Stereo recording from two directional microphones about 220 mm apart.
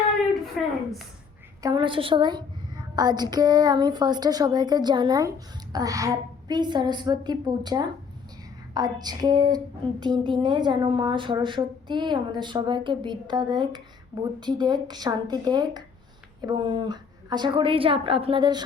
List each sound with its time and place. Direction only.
0.6 s a woman's voice: centre (ahead or behind)
1.6 s a woman's voice: 20° right (ahead or behind)
8.7 s a sound: 20° right (ahead or behind)
10.0 s a woman's voice: 20° right (ahead or behind)